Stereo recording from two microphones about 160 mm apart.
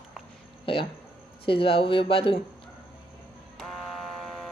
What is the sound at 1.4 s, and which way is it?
Speech, 35° left (ahead or behind).